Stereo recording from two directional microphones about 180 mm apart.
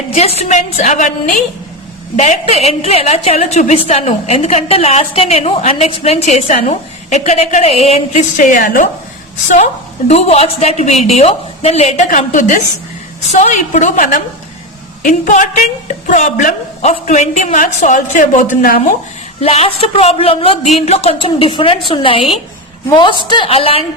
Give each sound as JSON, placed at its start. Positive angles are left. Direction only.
{"t": 0.1, "sound": "a woman's voice", "side_deg": 35}
{"t": 10.1, "sound": "a woman's voice", "side_deg": 35}
{"t": 19.4, "sound": "a woman's voice", "side_deg": 35}